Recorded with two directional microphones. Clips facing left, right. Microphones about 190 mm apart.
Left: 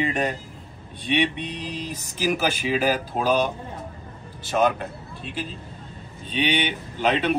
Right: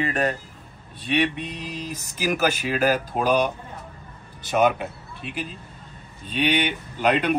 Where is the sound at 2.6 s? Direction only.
10° left (ahead or behind).